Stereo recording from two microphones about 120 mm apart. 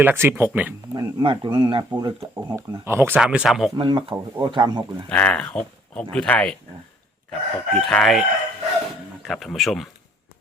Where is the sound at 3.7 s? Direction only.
40° right (ahead or behind).